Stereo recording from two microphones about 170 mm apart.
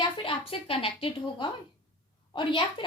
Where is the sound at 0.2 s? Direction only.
30° left (ahead or behind).